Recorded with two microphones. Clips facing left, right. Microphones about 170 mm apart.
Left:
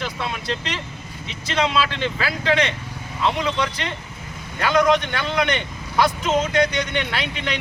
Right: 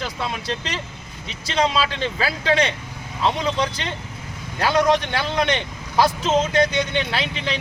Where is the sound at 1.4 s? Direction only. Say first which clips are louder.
Even; 35° right (ahead or behind).